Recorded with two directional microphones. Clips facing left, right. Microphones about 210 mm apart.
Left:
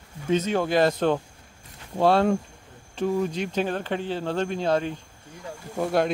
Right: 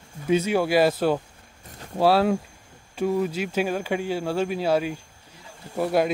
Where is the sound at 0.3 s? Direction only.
10° right (ahead or behind).